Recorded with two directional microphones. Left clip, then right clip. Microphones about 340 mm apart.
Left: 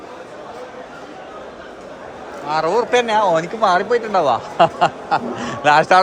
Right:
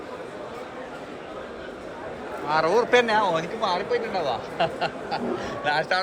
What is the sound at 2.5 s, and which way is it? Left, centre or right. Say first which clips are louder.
Speech: left 4 dB; centre.